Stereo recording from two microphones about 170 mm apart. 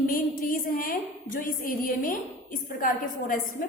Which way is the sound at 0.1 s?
55° left (ahead or behind).